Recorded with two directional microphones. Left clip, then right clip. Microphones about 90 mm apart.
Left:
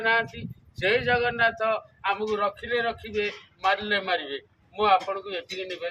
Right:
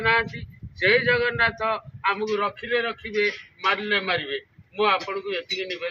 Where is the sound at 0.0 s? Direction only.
30° left (ahead or behind).